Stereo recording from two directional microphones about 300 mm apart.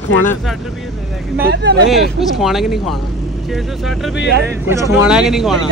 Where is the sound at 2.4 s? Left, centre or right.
Centre.